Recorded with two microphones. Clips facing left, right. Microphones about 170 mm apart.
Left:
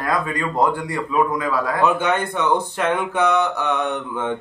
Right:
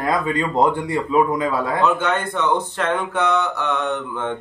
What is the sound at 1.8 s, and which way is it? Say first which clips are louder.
Speech: left 2 dB; 10° left (ahead or behind).